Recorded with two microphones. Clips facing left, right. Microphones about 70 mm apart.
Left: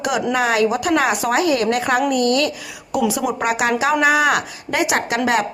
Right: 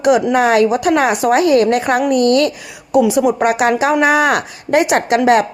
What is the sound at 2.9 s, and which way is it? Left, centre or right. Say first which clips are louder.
A woman's voice: right 7 dB; right.